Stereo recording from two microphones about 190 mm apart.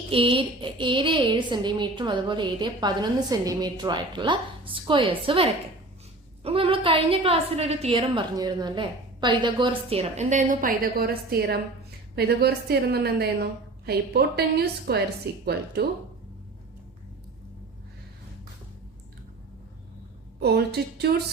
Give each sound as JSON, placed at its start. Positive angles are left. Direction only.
{"t": 0.1, "sound": "a woman's voice", "side_deg": -30}
{"t": 20.4, "sound": "a woman's voice", "side_deg": -55}